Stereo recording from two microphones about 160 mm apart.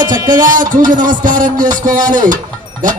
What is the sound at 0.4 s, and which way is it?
A man's voice, 55° right (ahead or behind).